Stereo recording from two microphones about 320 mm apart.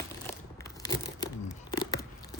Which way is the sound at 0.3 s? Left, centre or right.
Centre.